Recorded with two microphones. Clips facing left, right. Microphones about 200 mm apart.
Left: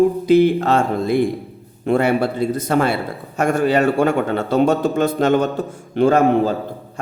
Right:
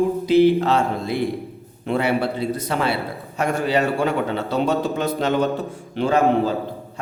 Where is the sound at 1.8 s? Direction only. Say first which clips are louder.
Left 4 dB; 50° left (ahead or behind).